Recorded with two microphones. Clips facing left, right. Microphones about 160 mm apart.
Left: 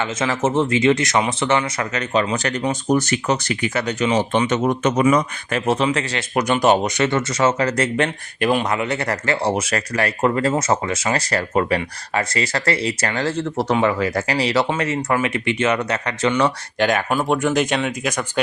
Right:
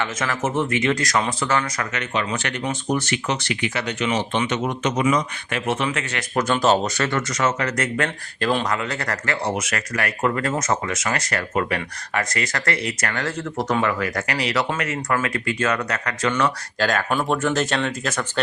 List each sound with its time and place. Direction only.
0.0 s speech: 25° left (ahead or behind)
6.3 s speech: 15° left (ahead or behind)
17.1 s speech: 5° left (ahead or behind)